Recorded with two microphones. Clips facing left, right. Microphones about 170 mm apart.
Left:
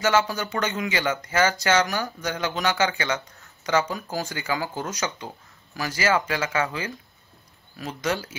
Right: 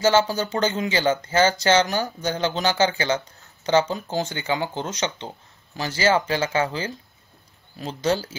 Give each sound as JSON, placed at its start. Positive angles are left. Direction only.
{"t": 0.0, "sound": "speech", "side_deg": -30}